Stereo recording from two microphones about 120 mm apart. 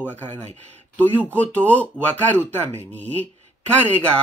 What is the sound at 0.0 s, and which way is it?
Speech, 15° left (ahead or behind).